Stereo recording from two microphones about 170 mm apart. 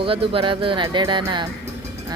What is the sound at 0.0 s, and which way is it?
Speech, 30° right (ahead or behind).